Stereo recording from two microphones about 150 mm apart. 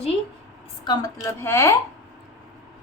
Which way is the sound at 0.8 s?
25° left (ahead or behind).